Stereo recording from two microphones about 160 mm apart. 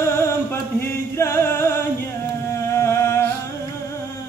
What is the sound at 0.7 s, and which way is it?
Music, 15° left (ahead or behind).